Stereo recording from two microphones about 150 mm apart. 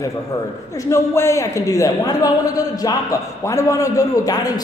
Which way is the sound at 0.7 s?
20° left (ahead or behind).